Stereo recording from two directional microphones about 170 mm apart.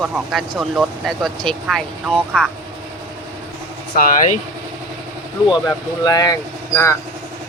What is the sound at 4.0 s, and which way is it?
Speech, 55° left (ahead or behind).